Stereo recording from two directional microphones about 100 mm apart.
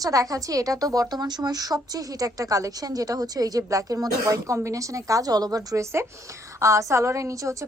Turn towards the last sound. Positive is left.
turn(degrees=-30)  # may be behind; listen again after turning